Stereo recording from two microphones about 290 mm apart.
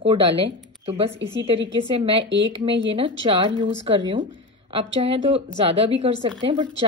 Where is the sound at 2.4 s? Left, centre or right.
Centre.